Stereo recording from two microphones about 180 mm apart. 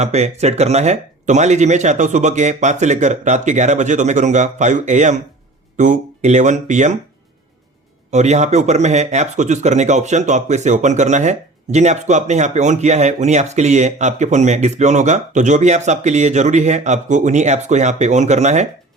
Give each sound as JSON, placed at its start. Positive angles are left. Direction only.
{"t": 0.0, "sound": "speech", "side_deg": -35}
{"t": 8.1, "sound": "speech", "side_deg": -40}